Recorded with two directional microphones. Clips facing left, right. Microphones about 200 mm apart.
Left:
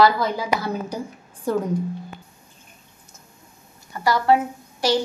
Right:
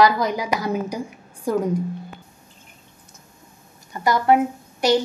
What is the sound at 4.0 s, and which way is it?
Speech, 20° right (ahead or behind).